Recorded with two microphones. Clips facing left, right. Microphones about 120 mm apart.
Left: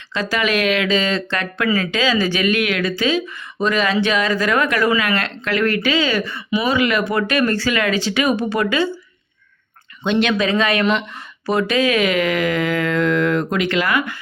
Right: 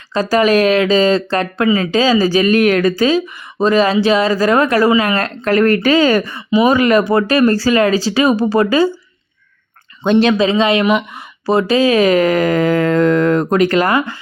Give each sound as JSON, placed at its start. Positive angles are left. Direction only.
{"t": 0.1, "sound": "speech", "side_deg": -40}
{"t": 1.6, "sound": "speech", "side_deg": -25}
{"t": 1.9, "sound": "speech", "side_deg": -40}
{"t": 10.0, "sound": "speech", "side_deg": -40}